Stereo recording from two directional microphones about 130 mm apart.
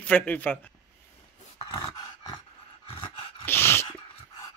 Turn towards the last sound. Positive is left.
turn(degrees=20)  # may be behind; listen again after turning